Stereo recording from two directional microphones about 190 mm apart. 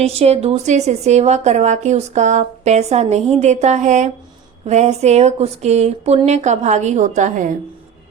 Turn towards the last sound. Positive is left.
turn(degrees=-40)  # may be behind; listen again after turning